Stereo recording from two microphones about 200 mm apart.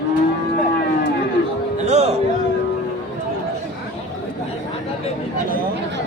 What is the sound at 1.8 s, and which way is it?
Music, 35° right (ahead or behind).